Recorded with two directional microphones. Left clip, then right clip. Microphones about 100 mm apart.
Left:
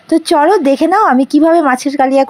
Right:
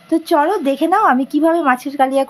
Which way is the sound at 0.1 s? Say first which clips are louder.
Left 5 dB; 80° left.